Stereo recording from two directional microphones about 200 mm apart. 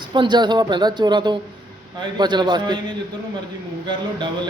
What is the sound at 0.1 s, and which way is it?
A man's voice, 20° right (ahead or behind).